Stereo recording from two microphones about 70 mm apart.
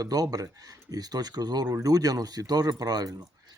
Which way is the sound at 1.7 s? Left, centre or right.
Right.